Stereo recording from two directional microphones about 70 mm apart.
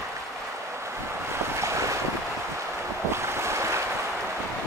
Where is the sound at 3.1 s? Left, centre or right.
Right.